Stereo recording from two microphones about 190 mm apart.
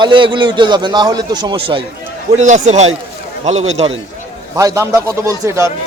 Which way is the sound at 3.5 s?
90° right.